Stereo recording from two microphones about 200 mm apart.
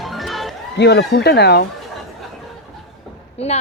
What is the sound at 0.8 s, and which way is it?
Speech, 55° left (ahead or behind).